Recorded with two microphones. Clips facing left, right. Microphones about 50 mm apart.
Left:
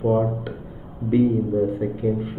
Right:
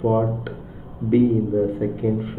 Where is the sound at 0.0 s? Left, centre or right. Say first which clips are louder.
Even; centre.